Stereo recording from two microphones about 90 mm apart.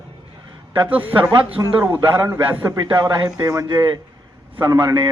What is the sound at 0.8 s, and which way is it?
Speech, 20° right (ahead or behind).